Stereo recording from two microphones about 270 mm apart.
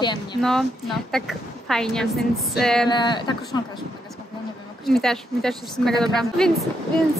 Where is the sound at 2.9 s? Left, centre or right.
Centre.